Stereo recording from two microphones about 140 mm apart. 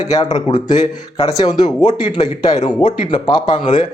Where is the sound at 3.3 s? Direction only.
30° left (ahead or behind).